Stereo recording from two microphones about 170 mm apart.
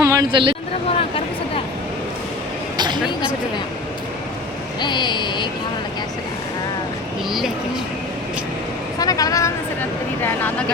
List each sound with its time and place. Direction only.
0.0 s a woman's voice: 20° right (ahead or behind)
0.9 s a sound: 35° left (ahead or behind)
2.7 s a sound: 25° right (ahead or behind)
4.8 s speech: 25° left (ahead or behind)
7.3 s speech: centre (ahead or behind)
9.0 s speech: 20° left (ahead or behind)